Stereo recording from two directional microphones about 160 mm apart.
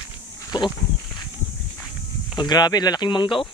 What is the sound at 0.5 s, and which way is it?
Speech, 25° left (ahead or behind).